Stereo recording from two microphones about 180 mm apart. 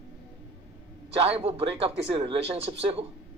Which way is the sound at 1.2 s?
30° right (ahead or behind).